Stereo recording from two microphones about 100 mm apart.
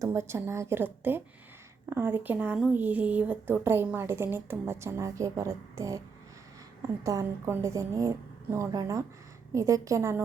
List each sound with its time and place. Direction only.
0.0 s a woman's voice: 30° right (ahead or behind)
7.0 s a woman's voice: 30° right (ahead or behind)